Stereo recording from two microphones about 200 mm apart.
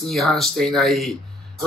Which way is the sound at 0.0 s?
Centre (ahead or behind).